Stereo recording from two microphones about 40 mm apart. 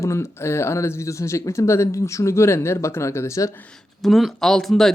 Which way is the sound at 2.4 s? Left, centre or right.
Left.